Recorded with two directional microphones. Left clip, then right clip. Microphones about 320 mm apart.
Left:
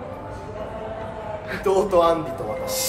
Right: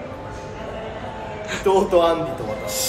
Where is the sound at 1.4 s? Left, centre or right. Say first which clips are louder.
Right 3 dB; centre.